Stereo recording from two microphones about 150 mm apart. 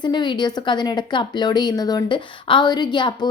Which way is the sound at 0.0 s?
30° left (ahead or behind).